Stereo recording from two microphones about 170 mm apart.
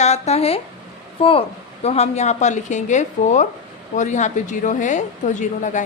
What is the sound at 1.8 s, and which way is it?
A woman's voice, 40° left (ahead or behind).